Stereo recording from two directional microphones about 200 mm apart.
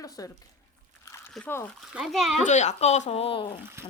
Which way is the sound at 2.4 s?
35° left (ahead or behind).